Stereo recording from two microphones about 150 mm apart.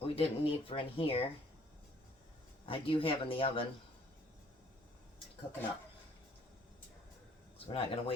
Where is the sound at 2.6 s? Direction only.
35° left (ahead or behind).